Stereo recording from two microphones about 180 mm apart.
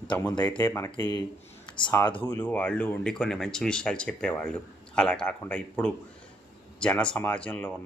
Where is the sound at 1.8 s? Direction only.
20° left (ahead or behind).